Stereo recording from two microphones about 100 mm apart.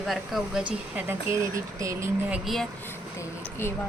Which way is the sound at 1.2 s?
30° right (ahead or behind).